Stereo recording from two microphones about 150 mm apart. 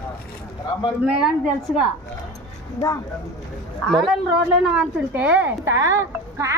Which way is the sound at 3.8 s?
Centre (ahead or behind).